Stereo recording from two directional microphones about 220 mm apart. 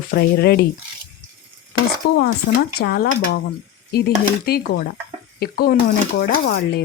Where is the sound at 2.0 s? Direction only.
45° left (ahead or behind).